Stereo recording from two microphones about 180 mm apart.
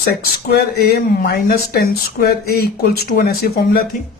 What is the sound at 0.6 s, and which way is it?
Speech, 60° left (ahead or behind).